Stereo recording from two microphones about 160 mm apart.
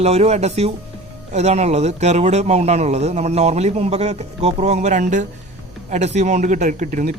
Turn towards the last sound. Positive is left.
turn(degrees=-55)  # may be behind; listen again after turning